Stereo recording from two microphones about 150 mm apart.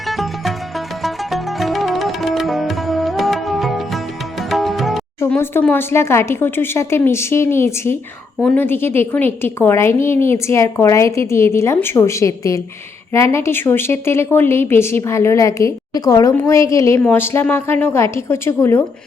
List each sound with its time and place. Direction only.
0.1 s music: centre (ahead or behind)
5.3 s a woman's voice: 10° left (ahead or behind)